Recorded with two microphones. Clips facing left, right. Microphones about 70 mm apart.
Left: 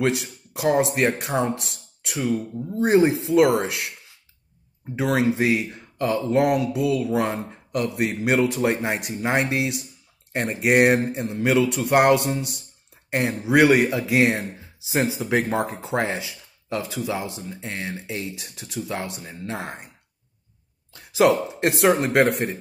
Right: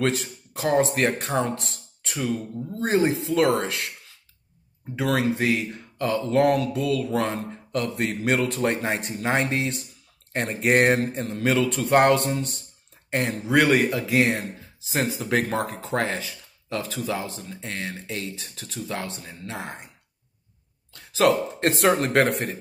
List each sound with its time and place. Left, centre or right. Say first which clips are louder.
0.0 s speech: left 2 dB; centre
4.9 s speech: left 2 dB; left
14.9 s speech: left 2 dB; centre; by 19.9 s left
20.9 s a sound: left 2 dB; centre
21.6 s speech: left 2 dB; centre